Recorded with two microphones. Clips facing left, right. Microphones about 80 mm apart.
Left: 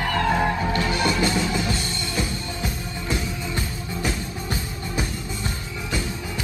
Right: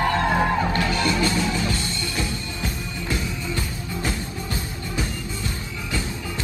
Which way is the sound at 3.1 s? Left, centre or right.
Left.